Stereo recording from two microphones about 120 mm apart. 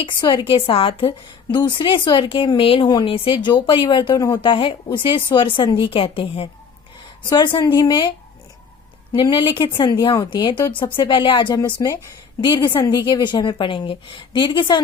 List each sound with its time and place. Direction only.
0.0 s a woman's voice: 40° left (ahead or behind)
9.1 s a woman's voice: 40° left (ahead or behind)